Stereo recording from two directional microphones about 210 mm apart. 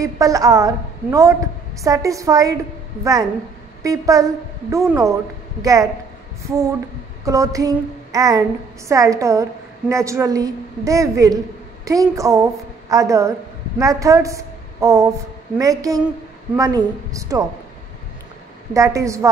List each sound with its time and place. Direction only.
0.0 s a woman's voice: 15° right (ahead or behind)
18.7 s speech: 15° right (ahead or behind)